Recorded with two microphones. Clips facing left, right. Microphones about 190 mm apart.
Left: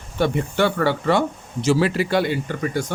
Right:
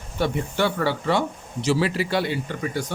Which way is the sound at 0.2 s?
60° left (ahead or behind).